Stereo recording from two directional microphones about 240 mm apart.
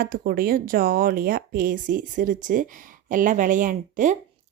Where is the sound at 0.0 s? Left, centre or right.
Right.